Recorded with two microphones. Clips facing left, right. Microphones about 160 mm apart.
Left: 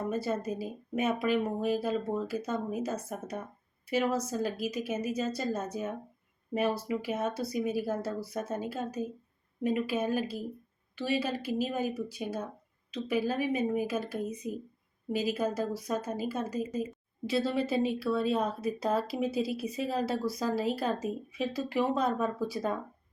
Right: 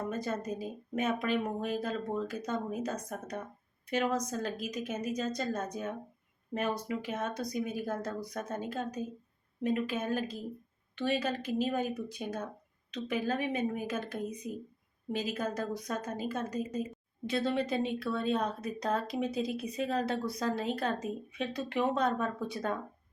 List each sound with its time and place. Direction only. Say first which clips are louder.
0.1 s speech: left 3 dB; 10° left (ahead or behind)